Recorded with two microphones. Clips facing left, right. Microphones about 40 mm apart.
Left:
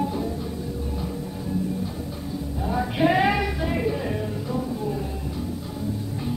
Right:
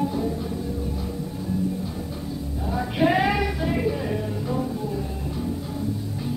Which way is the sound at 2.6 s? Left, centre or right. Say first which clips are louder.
Even; centre.